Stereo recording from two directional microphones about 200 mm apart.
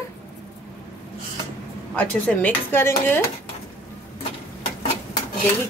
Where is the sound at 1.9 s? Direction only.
10° left (ahead or behind).